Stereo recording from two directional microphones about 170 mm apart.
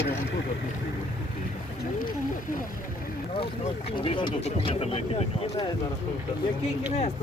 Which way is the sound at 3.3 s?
35° left (ahead or behind).